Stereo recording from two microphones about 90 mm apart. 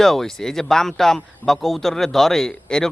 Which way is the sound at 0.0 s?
5° left (ahead or behind).